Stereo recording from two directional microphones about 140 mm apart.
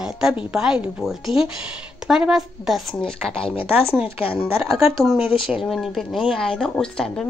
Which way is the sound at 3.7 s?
15° right (ahead or behind).